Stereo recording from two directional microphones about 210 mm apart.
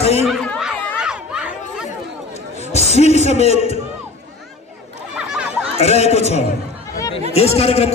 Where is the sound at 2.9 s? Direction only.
30° left (ahead or behind).